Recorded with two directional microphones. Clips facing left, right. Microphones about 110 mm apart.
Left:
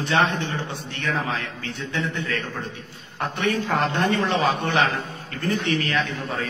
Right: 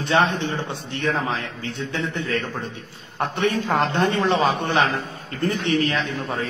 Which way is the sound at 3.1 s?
25° right (ahead or behind).